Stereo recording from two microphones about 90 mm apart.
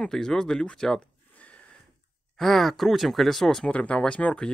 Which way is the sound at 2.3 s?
Centre (ahead or behind).